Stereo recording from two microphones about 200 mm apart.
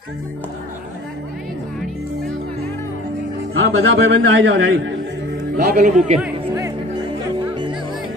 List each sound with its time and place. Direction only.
3.5 s a man's voice: 60° right (ahead or behind)
5.8 s a man's voice: 35° right (ahead or behind)